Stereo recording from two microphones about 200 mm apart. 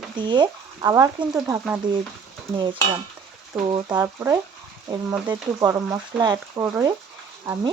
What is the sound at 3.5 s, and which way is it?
Frying, 15° right (ahead or behind).